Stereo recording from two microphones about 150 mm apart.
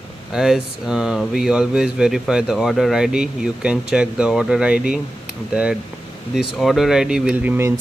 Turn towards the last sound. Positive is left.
turn(degrees=-15)  # may be behind; listen again after turning